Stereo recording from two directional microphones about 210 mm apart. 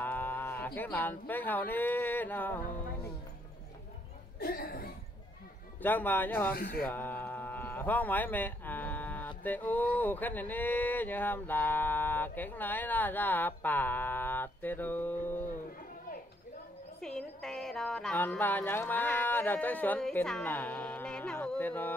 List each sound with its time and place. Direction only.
0.0 s speech: 10° left (ahead or behind)
4.4 s speech: 45° left (ahead or behind)
5.8 s music: 10° left (ahead or behind)
6.9 s speech: 10° left (ahead or behind)
17.0 s music: centre (ahead or behind)